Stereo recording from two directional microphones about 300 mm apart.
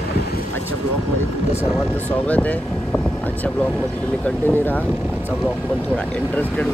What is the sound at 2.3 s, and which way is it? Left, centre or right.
Speech, centre.